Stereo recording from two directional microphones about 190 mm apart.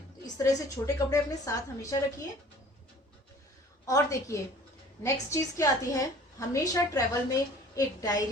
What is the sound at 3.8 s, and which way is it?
A woman's voice, 15° left (ahead or behind).